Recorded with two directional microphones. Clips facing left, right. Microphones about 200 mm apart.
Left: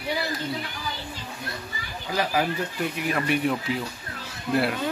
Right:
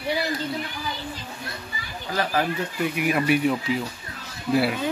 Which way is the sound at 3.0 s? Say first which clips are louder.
Right 4 dB; 10° right (ahead or behind).